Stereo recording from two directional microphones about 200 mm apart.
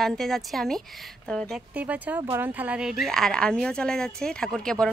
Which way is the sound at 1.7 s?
10° right (ahead or behind).